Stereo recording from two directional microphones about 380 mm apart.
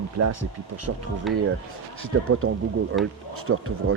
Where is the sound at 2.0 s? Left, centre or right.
Right.